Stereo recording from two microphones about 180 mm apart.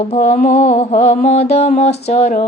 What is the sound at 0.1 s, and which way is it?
Mantra, 35° left (ahead or behind).